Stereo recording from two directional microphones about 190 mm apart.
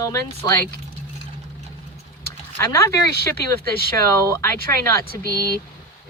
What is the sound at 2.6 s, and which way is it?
Speech, 15° left (ahead or behind).